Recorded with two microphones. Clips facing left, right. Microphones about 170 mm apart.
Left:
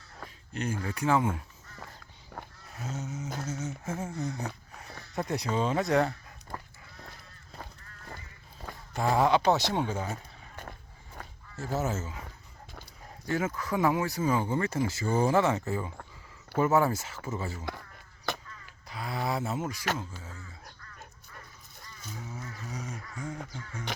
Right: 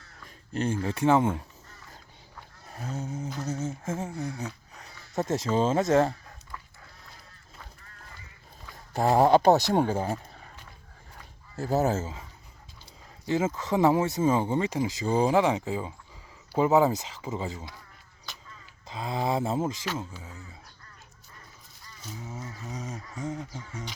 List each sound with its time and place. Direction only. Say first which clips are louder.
0.5 s speech: right 5 dB; 30° right (ahead or behind)
2.9 s speech: right 3 dB; 30° right (ahead or behind)
4.0 s speech: right 1 dB; 20° right (ahead or behind)
6.5 s dog: left 3 dB; 40° left (ahead or behind)
8.9 s speech: right 5 dB; 40° right (ahead or behind)
11.5 s speech: right 6 dB; 35° right (ahead or behind)
13.2 s speech: right 4 dB; 20° right (ahead or behind)
18.3 s a sound: left 12 dB; 55° left (ahead or behind)
18.9 s a sound: right 4 dB; 25° right (ahead or behind)
22.3 s a sound: right 2 dB; 20° right (ahead or behind)